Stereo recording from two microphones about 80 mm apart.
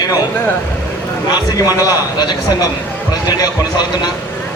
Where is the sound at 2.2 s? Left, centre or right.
Left.